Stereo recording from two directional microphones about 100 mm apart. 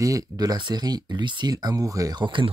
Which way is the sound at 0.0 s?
35° right (ahead or behind).